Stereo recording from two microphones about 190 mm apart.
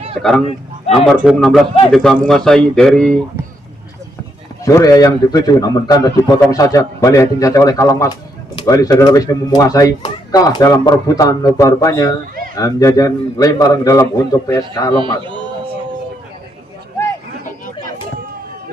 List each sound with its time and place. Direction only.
0.2 s speech: centre (ahead or behind)
4.6 s a man's voice: 15° left (ahead or behind)